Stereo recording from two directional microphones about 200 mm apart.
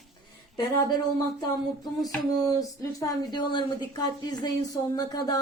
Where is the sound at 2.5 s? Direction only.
15° left (ahead or behind).